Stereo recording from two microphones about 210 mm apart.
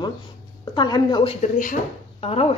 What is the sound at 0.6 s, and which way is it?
Speech, 20° left (ahead or behind).